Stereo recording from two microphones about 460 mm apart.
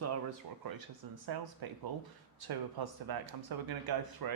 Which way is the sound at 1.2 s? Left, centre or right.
Right.